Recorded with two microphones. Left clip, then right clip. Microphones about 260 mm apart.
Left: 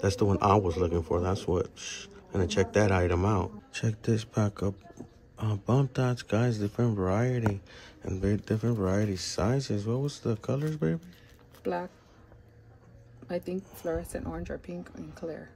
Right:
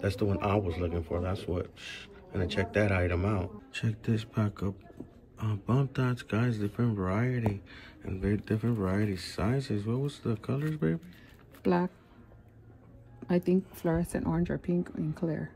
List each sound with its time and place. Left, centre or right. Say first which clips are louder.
0.0 s speech: left 5 dB; centre
13.9 s speech: right 3 dB; right